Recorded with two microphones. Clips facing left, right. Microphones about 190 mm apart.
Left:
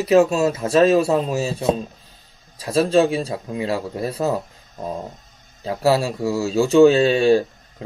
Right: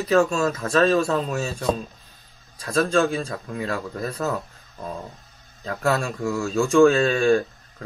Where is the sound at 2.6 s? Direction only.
25° left (ahead or behind).